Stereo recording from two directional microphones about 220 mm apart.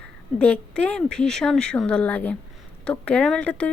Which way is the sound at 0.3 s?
5° left (ahead or behind).